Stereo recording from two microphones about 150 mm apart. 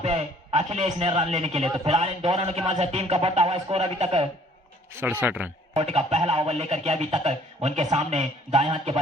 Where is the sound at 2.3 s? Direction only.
45° right (ahead or behind).